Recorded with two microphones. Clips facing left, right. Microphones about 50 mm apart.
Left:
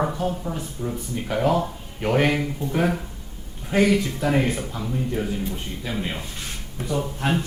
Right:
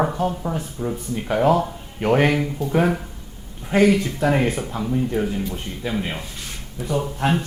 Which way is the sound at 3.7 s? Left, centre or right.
Right.